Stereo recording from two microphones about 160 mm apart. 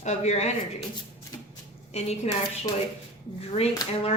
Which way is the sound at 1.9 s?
40° left (ahead or behind).